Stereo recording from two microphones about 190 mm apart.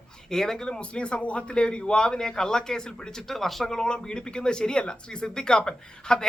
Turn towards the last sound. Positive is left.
turn(degrees=5)  # may be behind; listen again after turning